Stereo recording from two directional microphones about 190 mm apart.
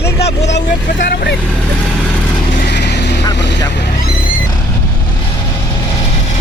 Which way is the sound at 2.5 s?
55° left (ahead or behind).